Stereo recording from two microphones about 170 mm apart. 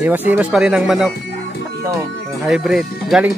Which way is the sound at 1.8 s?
20° right (ahead or behind).